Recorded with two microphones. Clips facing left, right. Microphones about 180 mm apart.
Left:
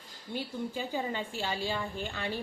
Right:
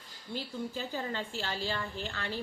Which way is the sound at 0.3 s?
15° left (ahead or behind).